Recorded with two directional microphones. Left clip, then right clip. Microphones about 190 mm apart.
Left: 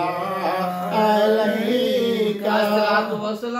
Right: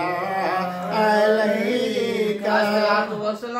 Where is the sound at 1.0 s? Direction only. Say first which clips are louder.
Even; 10° right (ahead or behind).